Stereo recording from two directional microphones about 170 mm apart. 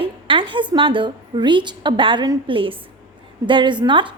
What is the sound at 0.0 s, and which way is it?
A woman's voice, 30° right (ahead or behind).